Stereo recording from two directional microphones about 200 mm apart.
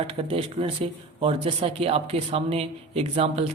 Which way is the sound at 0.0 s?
30° right (ahead or behind).